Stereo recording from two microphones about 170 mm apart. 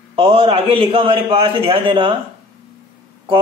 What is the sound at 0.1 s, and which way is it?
A man's voice, 30° right (ahead or behind).